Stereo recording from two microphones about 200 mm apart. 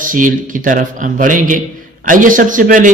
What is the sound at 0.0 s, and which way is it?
A man's voice, 40° right (ahead or behind).